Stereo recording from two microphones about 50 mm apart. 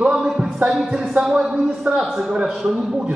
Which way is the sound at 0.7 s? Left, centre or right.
Centre.